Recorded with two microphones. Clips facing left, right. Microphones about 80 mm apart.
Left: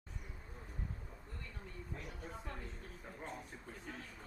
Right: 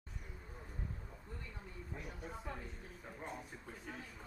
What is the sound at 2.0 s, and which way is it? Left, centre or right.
Speech, centre.